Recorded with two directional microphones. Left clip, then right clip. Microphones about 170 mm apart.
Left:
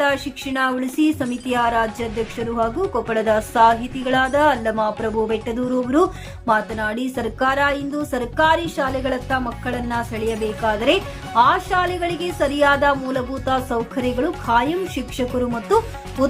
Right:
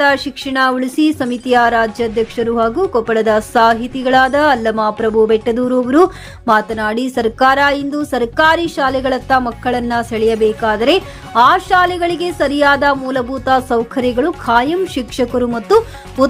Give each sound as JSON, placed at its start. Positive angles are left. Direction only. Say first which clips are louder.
{"t": 0.0, "sound": "a woman's voice", "louder": "right 7 dB", "side_deg": -35}
{"t": 10.3, "sound": "a woman's voice", "louder": "right 11 dB", "side_deg": 0}
{"t": 10.7, "sound": "a woman's voice", "louder": "right 5 dB", "side_deg": -30}
{"t": 14.2, "sound": "a woman's voice", "louder": "right 5 dB", "side_deg": -30}